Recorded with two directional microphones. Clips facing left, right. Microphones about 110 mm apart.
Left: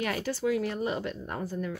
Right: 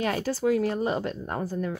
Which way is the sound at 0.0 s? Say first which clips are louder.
Right 4 dB; 35° right (ahead or behind).